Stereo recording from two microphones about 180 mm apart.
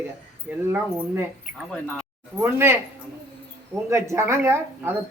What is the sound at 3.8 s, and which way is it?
Speech, 15° right (ahead or behind).